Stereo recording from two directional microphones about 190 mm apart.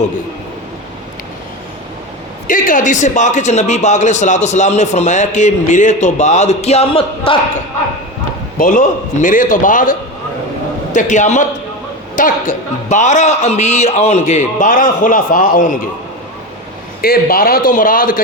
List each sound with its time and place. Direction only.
2.5 s speech: 45° left (ahead or behind)
8.5 s a man's voice: 45° left (ahead or behind)
17.0 s a man's voice: 50° left (ahead or behind)